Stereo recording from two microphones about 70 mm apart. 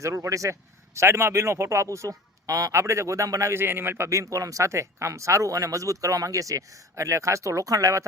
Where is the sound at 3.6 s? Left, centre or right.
Right.